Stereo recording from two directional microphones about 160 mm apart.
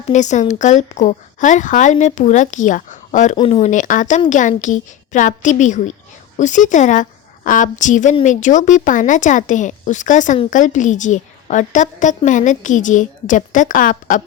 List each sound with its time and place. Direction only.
0.1 s a woman's voice: 50° left (ahead or behind)
3.3 s speech: 35° left (ahead or behind)
3.6 s a woman's voice: 50° left (ahead or behind)